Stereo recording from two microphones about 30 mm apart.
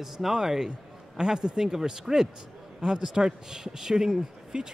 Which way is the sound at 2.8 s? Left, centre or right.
Right.